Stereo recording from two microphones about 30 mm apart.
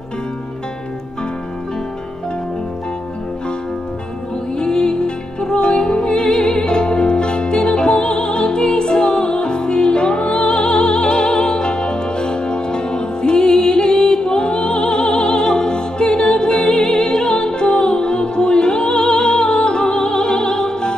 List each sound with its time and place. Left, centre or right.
4.6 s music: left